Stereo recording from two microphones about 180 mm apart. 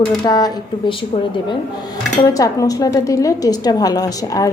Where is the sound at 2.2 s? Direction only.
20° left (ahead or behind).